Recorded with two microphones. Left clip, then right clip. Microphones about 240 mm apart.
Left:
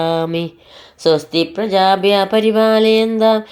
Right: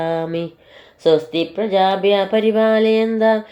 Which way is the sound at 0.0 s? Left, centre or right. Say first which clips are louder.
Left 3 dB; left.